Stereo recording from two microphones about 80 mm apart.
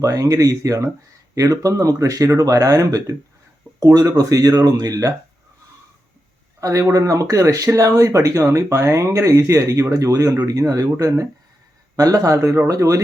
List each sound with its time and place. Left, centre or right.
0.0 s speech: right
4.2 s speech: right
6.6 s speech: right